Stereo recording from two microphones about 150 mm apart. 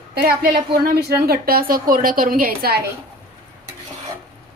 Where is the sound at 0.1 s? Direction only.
85° right.